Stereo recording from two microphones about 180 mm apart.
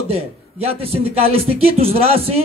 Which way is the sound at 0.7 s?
35° right (ahead or behind).